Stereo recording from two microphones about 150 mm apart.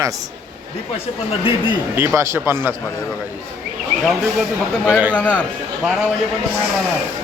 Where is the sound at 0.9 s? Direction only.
40° left (ahead or behind).